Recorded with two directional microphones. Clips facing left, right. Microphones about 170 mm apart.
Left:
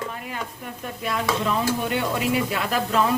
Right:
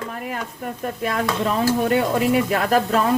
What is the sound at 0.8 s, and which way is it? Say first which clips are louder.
Speech: right 3 dB; 45° right (ahead or behind).